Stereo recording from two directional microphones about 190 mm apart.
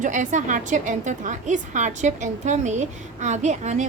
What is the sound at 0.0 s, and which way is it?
A woman's voice, 40° right (ahead or behind).